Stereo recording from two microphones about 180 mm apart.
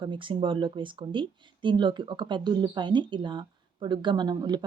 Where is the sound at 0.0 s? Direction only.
30° right (ahead or behind).